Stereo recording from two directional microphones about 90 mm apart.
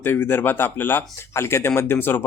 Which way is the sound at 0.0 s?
25° left (ahead or behind).